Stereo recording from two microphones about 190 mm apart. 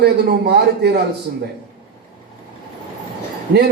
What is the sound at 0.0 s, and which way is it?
Speech, 60° right (ahead or behind).